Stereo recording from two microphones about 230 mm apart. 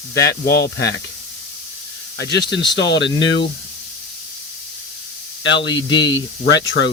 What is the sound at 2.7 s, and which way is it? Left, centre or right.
Speech, left.